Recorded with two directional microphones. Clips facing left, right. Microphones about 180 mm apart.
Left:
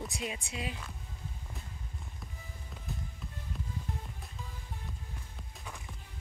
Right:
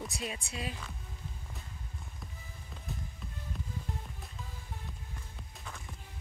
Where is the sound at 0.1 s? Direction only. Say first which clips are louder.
Left 1 dB; 15° left (ahead or behind).